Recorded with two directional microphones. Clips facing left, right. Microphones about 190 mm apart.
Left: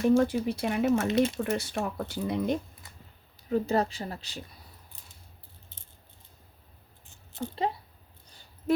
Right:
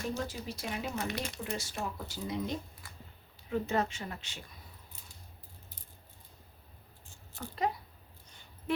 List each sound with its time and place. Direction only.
0.2 s speech: 60° left (ahead or behind)
1.0 s speech: 25° left (ahead or behind)
1.4 s speech: 60° left (ahead or behind)
2.8 s a sound: 20° left (ahead or behind)
3.5 s speech: 35° left (ahead or behind)
5.6 s rattle: 25° left (ahead or behind)
7.0 s a sound: 20° left (ahead or behind); by 8.7 s 35° left (ahead or behind)